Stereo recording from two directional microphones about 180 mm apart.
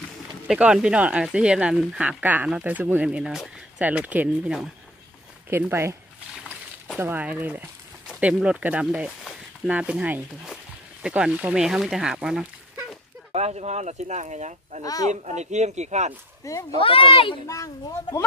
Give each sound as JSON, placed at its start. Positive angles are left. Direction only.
{"t": 0.5, "sound": "speech", "side_deg": -5}
{"t": 7.0, "sound": "speech", "side_deg": -10}
{"t": 13.3, "sound": "speech", "side_deg": -35}
{"t": 14.8, "sound": "speech", "side_deg": 20}
{"t": 15.2, "sound": "speech", "side_deg": -40}
{"t": 16.4, "sound": "speech", "side_deg": 15}
{"t": 16.8, "sound": "speech", "side_deg": 30}